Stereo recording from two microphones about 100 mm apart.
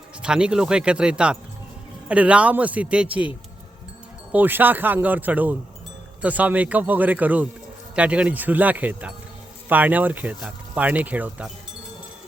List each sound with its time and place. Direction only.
0.2 s speech: 10° right (ahead or behind)
4.3 s speech: 20° right (ahead or behind)